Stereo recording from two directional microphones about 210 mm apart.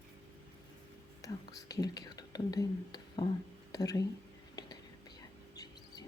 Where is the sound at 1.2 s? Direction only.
15° left (ahead or behind).